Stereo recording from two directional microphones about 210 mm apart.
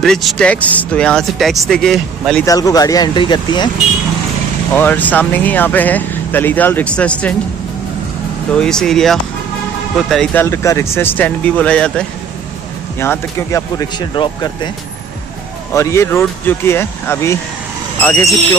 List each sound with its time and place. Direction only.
0.0 s speech: centre (ahead or behind)
2.4 s speech: 15° left (ahead or behind)
4.7 s speech: 10° left (ahead or behind)
8.5 s speech: 5° left (ahead or behind)
10.4 s speech: 15° left (ahead or behind)
15.7 s speech: 15° left (ahead or behind)